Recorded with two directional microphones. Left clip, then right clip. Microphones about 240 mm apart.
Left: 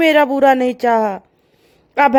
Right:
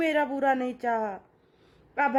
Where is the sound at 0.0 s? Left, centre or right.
Left.